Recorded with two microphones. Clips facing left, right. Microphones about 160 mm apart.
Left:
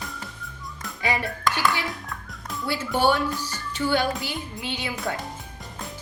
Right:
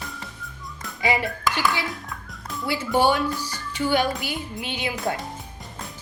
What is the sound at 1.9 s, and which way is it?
Music, centre (ahead or behind).